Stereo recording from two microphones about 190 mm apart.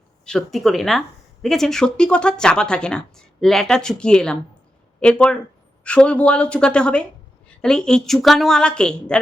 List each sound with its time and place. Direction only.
0.3 s speech: centre (ahead or behind)